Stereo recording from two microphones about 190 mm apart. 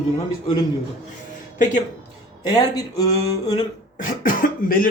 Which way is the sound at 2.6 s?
20° left (ahead or behind).